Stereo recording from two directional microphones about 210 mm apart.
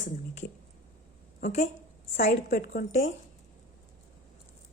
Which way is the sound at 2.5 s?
45° left (ahead or behind).